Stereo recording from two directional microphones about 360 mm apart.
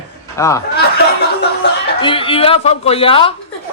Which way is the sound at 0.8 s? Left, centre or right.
Left.